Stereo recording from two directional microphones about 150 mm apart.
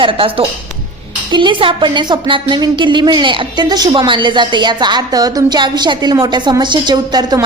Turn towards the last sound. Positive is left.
turn(degrees=-30)  # may be behind; listen again after turning